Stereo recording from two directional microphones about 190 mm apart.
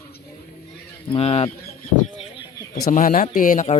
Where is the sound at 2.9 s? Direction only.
45° left (ahead or behind).